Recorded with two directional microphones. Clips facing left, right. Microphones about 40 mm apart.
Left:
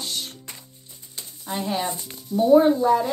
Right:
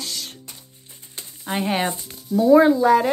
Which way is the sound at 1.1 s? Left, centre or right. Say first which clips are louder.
Right 4 dB; right.